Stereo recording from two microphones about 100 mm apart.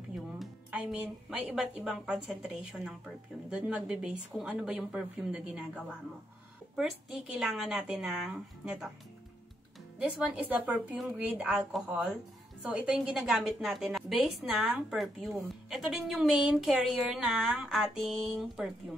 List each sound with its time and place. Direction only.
0.7 s speech: 15° right (ahead or behind)
9.9 s speech: 10° right (ahead or behind)
12.6 s speech: 15° right (ahead or behind)
13.1 s a woman's voice: centre (ahead or behind)